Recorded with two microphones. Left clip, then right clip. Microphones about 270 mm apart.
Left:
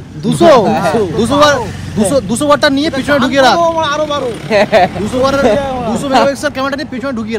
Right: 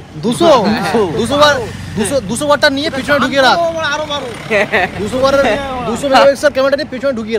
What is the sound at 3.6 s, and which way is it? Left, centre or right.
A man's voice, left.